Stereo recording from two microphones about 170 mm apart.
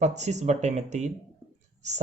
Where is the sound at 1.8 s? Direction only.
45° right (ahead or behind).